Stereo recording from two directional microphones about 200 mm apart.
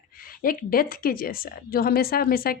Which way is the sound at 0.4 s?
45° left (ahead or behind).